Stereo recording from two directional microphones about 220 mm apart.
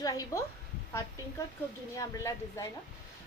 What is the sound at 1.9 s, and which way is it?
Speech, 15° left (ahead or behind).